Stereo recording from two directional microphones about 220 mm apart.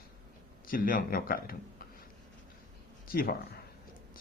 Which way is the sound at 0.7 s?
40° left (ahead or behind).